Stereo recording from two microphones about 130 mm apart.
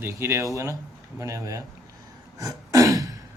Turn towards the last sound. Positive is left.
turn(degrees=-25)  # may be behind; listen again after turning